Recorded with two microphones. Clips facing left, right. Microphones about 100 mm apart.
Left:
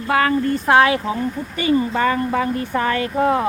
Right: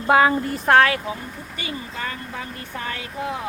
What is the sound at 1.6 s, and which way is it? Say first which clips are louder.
Speech: left 14 dB; 80° left.